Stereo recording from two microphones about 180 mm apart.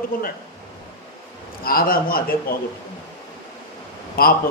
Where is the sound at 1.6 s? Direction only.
55° left (ahead or behind).